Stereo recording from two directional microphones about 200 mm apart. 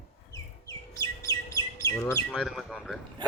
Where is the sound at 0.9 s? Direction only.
15° left (ahead or behind).